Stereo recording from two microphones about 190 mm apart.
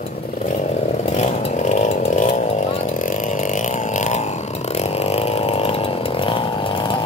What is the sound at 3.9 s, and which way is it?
Chainsaw, 40° left (ahead or behind).